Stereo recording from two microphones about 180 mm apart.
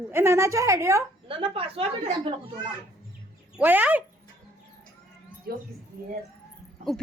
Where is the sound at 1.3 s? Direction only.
30° right (ahead or behind).